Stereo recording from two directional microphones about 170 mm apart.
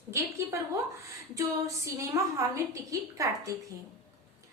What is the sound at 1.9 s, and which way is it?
A woman's voice, 20° right (ahead or behind).